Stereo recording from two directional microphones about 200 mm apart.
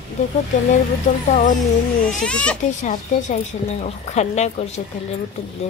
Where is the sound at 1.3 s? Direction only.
40° left (ahead or behind).